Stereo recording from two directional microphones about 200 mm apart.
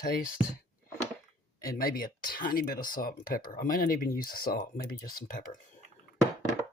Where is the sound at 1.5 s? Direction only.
45° left (ahead or behind).